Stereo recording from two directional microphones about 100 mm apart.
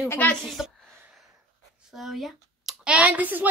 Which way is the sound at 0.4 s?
Centre (ahead or behind).